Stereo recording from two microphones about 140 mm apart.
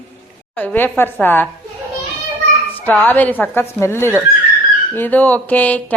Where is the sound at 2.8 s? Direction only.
10° left (ahead or behind).